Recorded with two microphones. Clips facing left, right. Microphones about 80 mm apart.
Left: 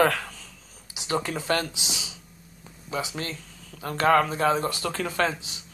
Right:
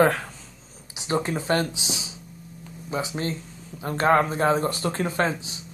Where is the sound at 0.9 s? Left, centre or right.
Right.